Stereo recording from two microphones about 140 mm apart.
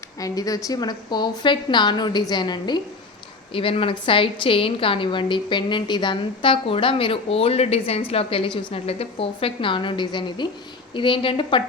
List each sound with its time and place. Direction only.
0.2 s a woman's voice: 25° left (ahead or behind)
3.5 s a woman's voice: 40° left (ahead or behind)